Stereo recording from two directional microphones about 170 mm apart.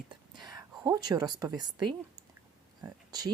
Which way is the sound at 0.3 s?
25° right (ahead or behind).